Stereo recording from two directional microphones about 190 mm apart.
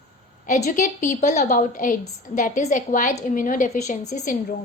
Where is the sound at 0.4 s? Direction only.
45° left (ahead or behind).